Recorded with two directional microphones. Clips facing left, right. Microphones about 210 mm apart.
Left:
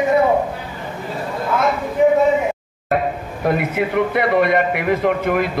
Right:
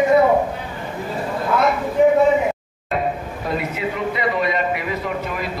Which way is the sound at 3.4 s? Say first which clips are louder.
Left 5 dB; 60° left (ahead or behind).